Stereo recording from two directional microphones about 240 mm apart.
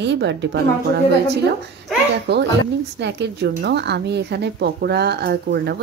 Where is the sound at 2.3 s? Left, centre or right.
Right.